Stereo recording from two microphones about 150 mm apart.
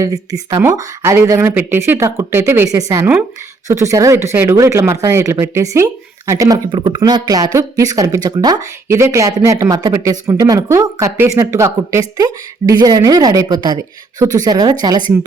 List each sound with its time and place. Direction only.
0.0 s speech: 25° right (ahead or behind)